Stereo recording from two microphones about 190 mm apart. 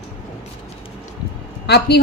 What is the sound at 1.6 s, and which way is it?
Speech, 60° left (ahead or behind).